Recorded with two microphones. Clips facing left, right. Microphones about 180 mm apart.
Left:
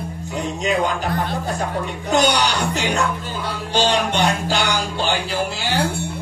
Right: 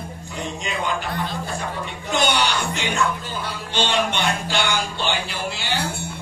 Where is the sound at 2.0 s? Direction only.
40° left (ahead or behind).